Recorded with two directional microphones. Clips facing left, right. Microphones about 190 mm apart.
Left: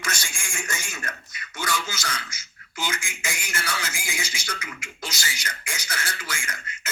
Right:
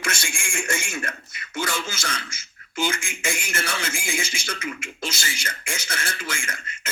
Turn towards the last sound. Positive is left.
turn(degrees=-30)  # may be behind; listen again after turning